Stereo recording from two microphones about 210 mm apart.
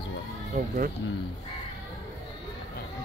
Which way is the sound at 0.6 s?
40° right (ahead or behind).